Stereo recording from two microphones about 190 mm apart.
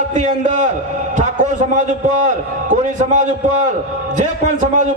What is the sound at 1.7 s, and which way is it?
A man's voice, 40° right (ahead or behind).